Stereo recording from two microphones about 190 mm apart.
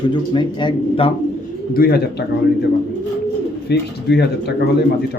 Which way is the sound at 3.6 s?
60° left (ahead or behind).